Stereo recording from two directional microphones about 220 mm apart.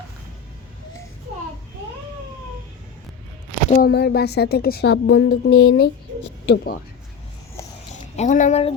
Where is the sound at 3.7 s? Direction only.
40° left (ahead or behind).